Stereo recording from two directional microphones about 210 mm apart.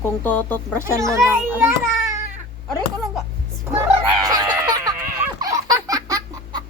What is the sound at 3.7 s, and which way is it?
Speech, 10° right (ahead or behind).